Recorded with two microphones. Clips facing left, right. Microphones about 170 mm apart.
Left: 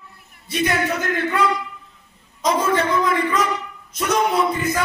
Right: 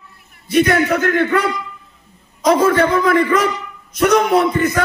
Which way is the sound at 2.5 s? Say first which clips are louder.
Right 6 dB; 65° right (ahead or behind).